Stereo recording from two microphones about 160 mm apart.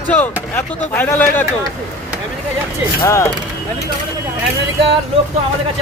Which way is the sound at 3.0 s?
15° left (ahead or behind).